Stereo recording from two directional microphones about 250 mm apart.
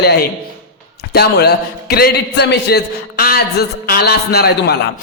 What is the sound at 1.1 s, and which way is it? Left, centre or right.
A man's voice, left.